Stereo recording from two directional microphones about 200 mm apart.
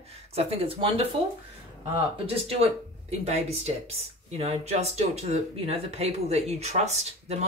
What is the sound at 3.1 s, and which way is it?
Speech, 35° right (ahead or behind).